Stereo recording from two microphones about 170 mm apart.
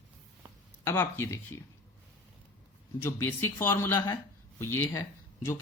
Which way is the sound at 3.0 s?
15° left (ahead or behind).